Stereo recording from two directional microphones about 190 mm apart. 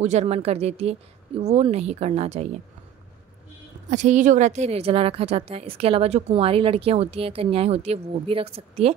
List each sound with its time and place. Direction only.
0.0 s speech: 35° right (ahead or behind)
3.9 s speech: 40° right (ahead or behind)